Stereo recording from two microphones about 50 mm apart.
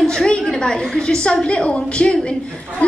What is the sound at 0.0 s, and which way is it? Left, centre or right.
A woman's voice, centre.